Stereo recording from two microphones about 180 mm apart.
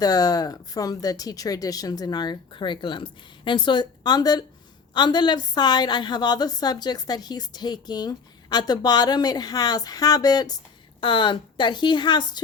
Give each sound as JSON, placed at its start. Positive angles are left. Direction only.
{"t": 0.0, "sound": "a woman's voice", "side_deg": 20}